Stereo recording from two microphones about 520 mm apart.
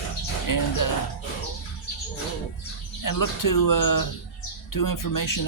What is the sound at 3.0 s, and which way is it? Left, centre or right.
Speech, left.